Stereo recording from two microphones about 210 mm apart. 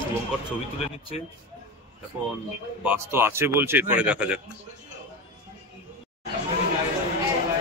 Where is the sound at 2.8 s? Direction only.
10° right (ahead or behind).